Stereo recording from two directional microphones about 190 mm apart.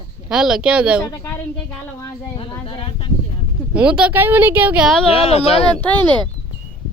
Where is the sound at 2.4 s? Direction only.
30° left (ahead or behind).